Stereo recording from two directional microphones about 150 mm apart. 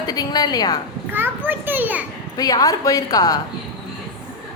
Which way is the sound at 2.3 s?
25° left (ahead or behind).